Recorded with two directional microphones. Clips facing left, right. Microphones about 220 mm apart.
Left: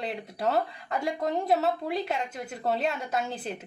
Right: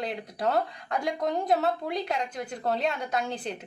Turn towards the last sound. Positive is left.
turn(degrees=5)  # may be behind; listen again after turning